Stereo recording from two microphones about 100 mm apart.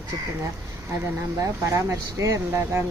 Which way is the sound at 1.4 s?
30° right (ahead or behind).